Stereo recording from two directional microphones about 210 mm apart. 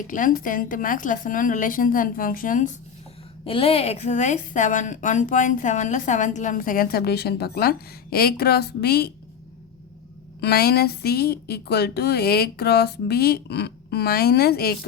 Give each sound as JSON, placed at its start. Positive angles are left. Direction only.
{"t": 0.1, "sound": "a woman's voice", "side_deg": 40}
{"t": 3.4, "sound": "a woman's voice", "side_deg": 25}
{"t": 10.4, "sound": "a woman's voice", "side_deg": 50}